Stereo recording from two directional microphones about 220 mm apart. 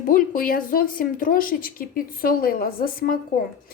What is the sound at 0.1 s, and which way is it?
A woman's voice, 40° left (ahead or behind).